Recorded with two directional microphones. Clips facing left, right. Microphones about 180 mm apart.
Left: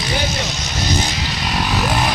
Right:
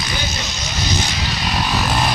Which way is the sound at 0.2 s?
80° left.